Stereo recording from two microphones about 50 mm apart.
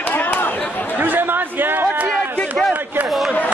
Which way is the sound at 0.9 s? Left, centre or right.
Right.